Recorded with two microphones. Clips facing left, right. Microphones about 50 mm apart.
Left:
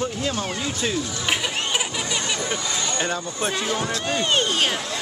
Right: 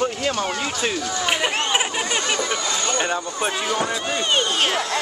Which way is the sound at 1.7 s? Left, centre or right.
Right.